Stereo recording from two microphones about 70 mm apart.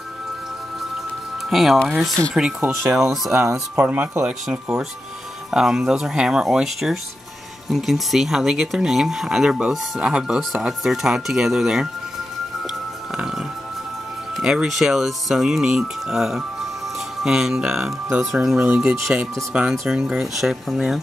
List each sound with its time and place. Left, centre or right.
1.5 s speech: centre
3.3 s speech: right
3.7 s speech: right; by 11.9 s centre
13.1 s speech: centre